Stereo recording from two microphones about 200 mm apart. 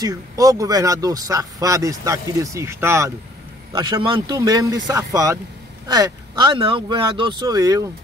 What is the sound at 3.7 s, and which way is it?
Speech, 25° right (ahead or behind).